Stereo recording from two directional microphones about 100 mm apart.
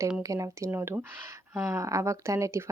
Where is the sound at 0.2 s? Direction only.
35° right (ahead or behind).